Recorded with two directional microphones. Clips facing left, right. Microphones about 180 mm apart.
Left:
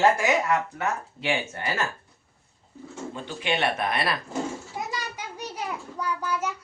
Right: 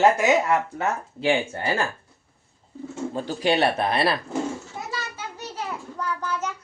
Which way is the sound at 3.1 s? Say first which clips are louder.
Right 6 dB; 35° right (ahead or behind).